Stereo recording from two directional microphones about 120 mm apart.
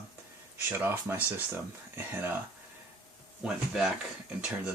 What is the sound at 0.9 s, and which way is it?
Speech, 15° right (ahead or behind).